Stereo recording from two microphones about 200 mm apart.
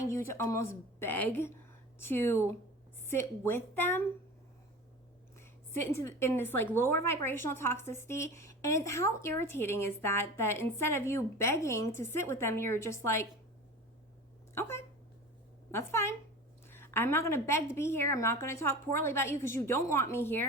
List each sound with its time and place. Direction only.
0.0 s speech: 15° left (ahead or behind)
5.4 s a woman's voice: 15° left (ahead or behind)
14.5 s speech: 10° left (ahead or behind)